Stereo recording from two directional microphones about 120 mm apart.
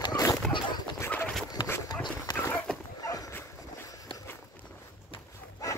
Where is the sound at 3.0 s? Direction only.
30° left (ahead or behind).